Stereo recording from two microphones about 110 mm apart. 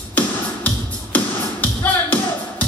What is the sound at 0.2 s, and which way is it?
Music, 15° left (ahead or behind).